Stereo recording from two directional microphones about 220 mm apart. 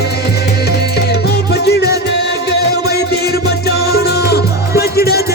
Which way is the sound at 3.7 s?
45° left (ahead or behind).